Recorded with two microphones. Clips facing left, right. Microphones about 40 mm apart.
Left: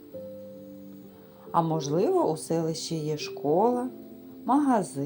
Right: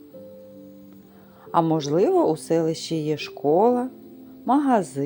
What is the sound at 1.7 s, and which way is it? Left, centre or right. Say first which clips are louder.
Speech: right 5 dB; right.